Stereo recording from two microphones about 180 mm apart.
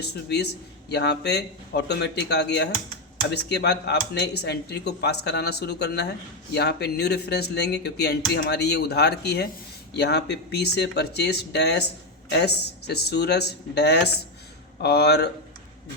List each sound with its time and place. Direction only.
0.0 s speech: 65° left (ahead or behind)